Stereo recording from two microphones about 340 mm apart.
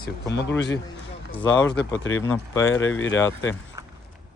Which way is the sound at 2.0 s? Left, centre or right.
Left.